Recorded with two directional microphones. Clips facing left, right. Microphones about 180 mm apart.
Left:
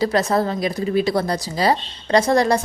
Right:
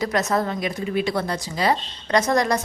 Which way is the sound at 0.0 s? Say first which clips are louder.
Left 4 dB; 30° left (ahead or behind).